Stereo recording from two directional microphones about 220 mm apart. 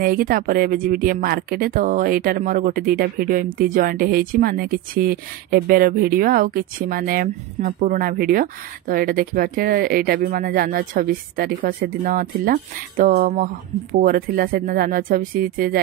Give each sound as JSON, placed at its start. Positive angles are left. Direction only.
{"t": 0.0, "sound": "speech", "side_deg": -40}